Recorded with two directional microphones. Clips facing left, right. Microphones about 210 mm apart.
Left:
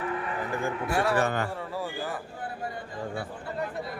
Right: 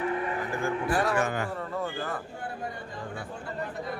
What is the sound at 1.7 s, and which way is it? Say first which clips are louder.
Speech: right 1 dB; 5° left (ahead or behind).